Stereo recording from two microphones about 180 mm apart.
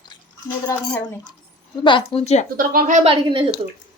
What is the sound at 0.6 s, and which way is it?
Speech, 15° left (ahead or behind).